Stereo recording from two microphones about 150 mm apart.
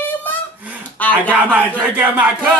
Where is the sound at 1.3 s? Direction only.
10° right (ahead or behind).